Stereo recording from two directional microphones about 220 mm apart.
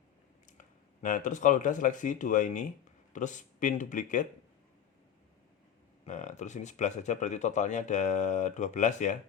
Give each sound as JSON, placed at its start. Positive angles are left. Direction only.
{"t": 1.0, "sound": "speech", "side_deg": 35}
{"t": 6.1, "sound": "speech", "side_deg": 35}